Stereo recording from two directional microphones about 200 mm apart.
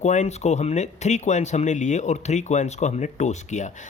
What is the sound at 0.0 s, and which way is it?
Speech, 35° left (ahead or behind).